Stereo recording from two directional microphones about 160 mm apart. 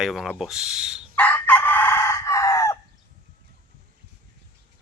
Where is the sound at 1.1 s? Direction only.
10° left (ahead or behind).